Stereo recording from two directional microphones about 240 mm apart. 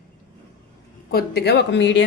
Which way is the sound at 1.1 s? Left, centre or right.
Left.